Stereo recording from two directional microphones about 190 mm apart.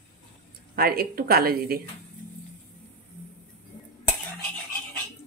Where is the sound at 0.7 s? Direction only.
50° right (ahead or behind).